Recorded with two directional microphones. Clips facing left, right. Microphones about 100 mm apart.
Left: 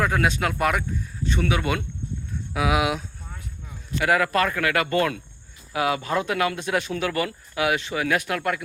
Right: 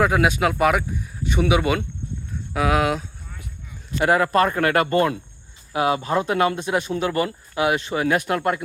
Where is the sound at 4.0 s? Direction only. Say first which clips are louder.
Right 3 dB; 35° right (ahead or behind).